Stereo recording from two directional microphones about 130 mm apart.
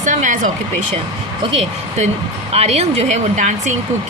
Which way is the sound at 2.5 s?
55° right (ahead or behind).